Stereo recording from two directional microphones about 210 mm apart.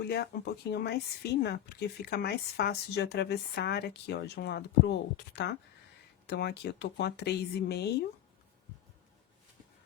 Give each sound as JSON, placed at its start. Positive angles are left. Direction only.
{"t": 0.1, "sound": "speech", "side_deg": 50}